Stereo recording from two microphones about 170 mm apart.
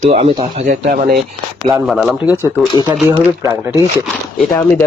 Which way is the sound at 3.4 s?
15° right (ahead or behind).